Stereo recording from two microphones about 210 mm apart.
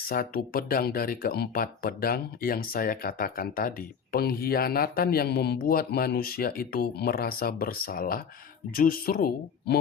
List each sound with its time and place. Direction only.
0.1 s speech: 45° left (ahead or behind)